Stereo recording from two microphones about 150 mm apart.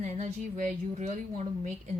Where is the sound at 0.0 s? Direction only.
50° right (ahead or behind).